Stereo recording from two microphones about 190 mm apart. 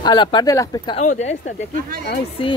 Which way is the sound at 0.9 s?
40° left (ahead or behind).